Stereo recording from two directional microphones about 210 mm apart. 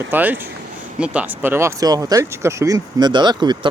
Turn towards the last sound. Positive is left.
turn(degrees=-20)  # may be behind; listen again after turning